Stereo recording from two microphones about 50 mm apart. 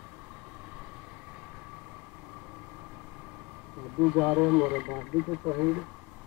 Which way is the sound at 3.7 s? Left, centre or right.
Centre.